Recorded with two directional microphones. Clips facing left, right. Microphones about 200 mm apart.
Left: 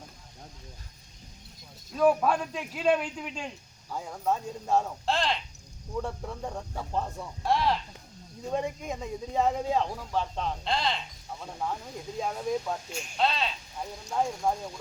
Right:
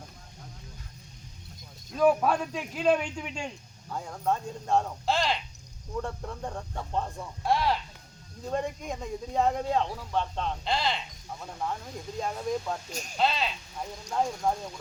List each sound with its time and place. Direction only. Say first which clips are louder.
2.0 s a man's voice: even; centre (ahead or behind)
12.9 s speech: even; 40° right (ahead or behind)
13.1 s a man's voice: right 1 dB; centre (ahead or behind)